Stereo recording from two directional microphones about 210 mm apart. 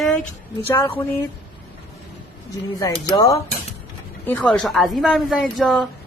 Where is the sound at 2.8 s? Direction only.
15° left (ahead or behind); by 5.9 s centre (ahead or behind).